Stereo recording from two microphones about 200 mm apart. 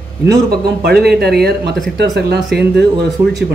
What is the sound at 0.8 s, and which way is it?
A woman's voice, 55° right (ahead or behind).